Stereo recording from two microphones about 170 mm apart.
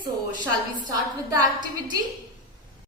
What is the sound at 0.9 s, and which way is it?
Speech, 20° right (ahead or behind).